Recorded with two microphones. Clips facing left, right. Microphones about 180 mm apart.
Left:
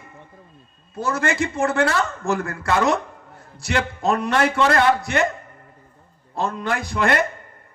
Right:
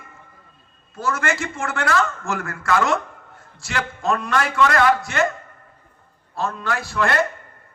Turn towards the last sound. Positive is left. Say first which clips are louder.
# left 1 dB
turn(degrees=20)  # may be behind; listen again after turning